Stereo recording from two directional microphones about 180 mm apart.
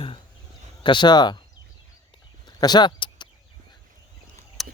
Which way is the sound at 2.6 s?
25° left (ahead or behind).